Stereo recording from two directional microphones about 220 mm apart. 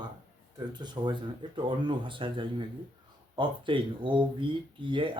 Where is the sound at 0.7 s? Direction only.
20° right (ahead or behind).